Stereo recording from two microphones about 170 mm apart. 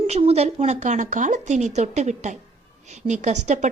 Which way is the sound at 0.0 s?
35° right (ahead or behind).